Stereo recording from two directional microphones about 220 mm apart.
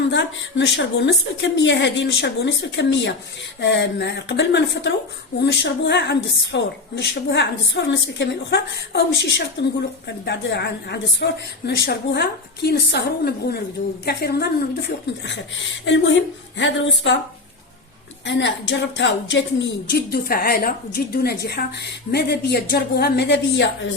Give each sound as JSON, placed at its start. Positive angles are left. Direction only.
{"t": 0.1, "sound": "a woman's voice", "side_deg": 55}
{"t": 18.3, "sound": "a woman's voice", "side_deg": 55}